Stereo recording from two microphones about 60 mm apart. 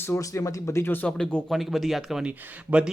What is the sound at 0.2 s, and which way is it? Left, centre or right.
Speech, left.